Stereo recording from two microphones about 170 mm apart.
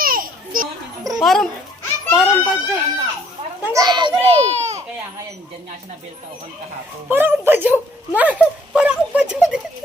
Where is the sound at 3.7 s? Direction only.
25° right (ahead or behind); by 4.7 s 40° right (ahead or behind).